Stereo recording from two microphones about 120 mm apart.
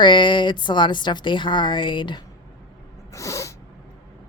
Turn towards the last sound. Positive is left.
turn(degrees=25)  # may be behind; listen again after turning